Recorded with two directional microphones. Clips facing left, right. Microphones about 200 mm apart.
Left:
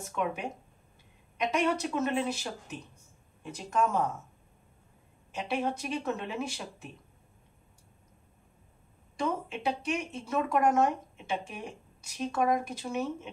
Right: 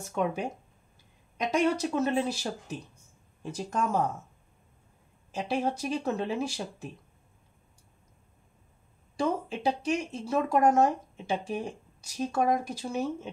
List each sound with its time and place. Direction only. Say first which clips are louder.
0.1 s speech: right 3 dB; 35° right (ahead or behind)
1.5 s speech: right 3 dB; 35° right (ahead or behind)
5.3 s speech: right 2 dB; 35° right (ahead or behind)
9.1 s speech: right 3 dB; 35° right (ahead or behind)